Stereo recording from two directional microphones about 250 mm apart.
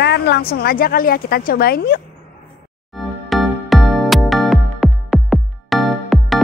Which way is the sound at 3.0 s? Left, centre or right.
Centre.